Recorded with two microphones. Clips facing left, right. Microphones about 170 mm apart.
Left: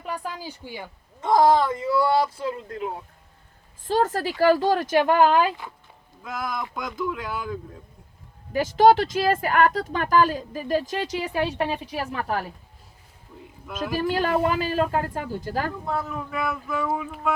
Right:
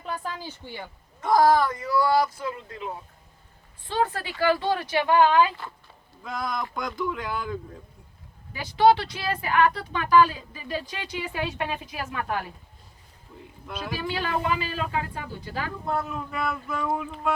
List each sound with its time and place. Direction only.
0.0 s a sound: 10° left (ahead or behind)
1.2 s speech: 25° left (ahead or behind)
2.6 s speech: 50° left (ahead or behind)
3.8 s speech: 40° left (ahead or behind)
6.2 s speech: 5° left (ahead or behind)
8.5 s speech: 45° left (ahead or behind)
13.9 s speech: 45° left (ahead or behind)
15.9 s speech: centre (ahead or behind)